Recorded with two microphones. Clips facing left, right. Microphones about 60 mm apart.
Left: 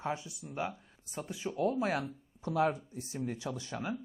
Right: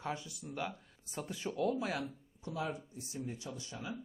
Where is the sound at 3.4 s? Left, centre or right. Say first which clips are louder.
Left 6 dB; left.